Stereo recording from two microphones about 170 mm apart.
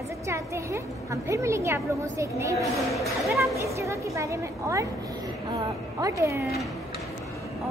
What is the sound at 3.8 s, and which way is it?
A woman's voice, 15° right (ahead or behind).